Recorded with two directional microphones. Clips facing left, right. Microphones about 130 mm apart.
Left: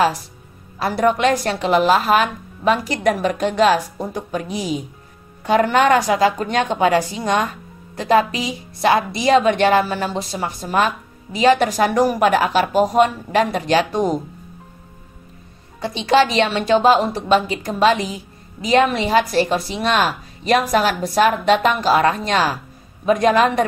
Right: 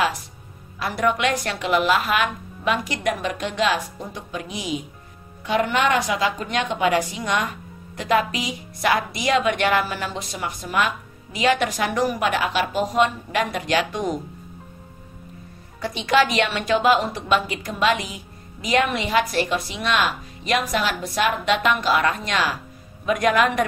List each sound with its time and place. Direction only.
0.7 s a woman's voice: 35° left (ahead or behind)
15.8 s a woman's voice: 25° left (ahead or behind)